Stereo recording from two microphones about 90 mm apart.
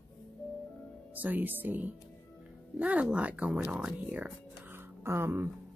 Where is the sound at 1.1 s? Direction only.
20° right (ahead or behind).